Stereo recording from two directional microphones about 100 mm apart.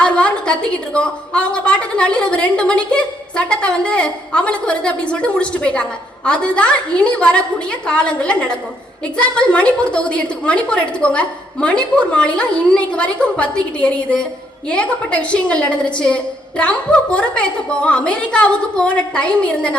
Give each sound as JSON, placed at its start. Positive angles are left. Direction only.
{"t": 0.0, "sound": "a woman's voice", "side_deg": 10}